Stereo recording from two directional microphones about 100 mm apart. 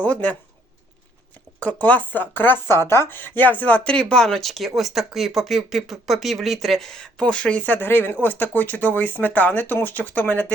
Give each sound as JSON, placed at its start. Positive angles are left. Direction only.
{"t": 0.0, "sound": "speech", "side_deg": 15}
{"t": 1.5, "sound": "speech", "side_deg": 15}